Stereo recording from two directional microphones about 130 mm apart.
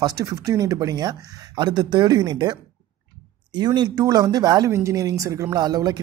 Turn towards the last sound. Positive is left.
turn(degrees=-30)  # may be behind; listen again after turning